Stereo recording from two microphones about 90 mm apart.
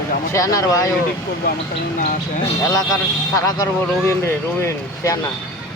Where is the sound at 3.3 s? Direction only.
40° left (ahead or behind).